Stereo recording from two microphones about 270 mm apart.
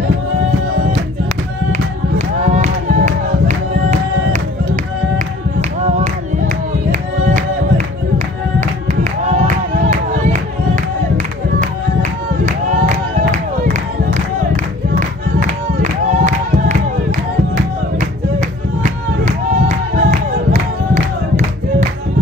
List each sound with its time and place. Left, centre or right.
1.7 s music: right
5.6 s music: right
11.6 s music: right
15.8 s crowd: right
18.8 s music: right